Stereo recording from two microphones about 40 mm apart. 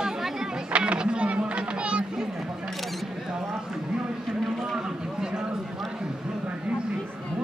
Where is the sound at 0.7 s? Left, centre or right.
Right.